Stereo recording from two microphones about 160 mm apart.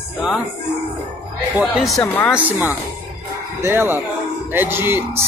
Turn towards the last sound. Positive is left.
turn(degrees=-15)  # may be behind; listen again after turning